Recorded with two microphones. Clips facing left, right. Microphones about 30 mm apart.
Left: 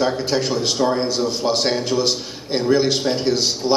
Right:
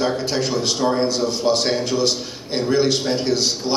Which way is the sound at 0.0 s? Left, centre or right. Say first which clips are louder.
Left 1 dB; centre.